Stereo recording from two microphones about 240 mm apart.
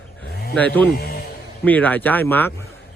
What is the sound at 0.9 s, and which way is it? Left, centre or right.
Speech, left.